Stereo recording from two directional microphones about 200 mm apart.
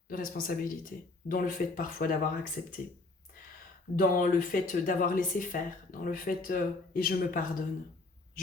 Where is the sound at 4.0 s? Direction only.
45° left (ahead or behind).